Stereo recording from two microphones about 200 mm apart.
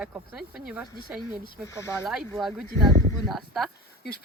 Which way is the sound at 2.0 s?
Centre (ahead or behind).